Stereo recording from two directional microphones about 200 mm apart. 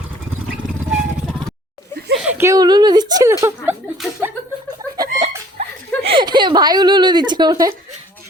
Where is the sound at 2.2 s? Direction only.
15° right (ahead or behind).